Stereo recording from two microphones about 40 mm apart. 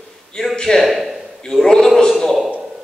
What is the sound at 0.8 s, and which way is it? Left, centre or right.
Speech, centre.